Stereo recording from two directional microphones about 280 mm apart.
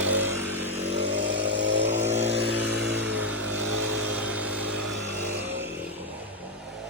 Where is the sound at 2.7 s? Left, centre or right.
Right.